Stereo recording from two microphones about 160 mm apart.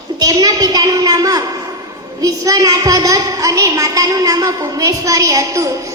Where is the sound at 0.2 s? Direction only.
25° right (ahead or behind).